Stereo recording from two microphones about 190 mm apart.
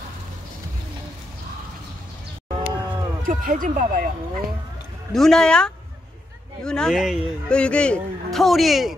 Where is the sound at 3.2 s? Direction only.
45° right (ahead or behind).